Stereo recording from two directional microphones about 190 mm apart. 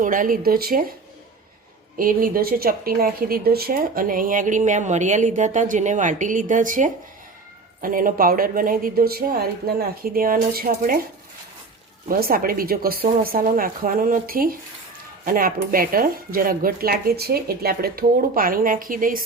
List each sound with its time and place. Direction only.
0.0 s speech: 45° right (ahead or behind)
2.0 s speech: 50° right (ahead or behind)
12.0 s speech: 50° right (ahead or behind)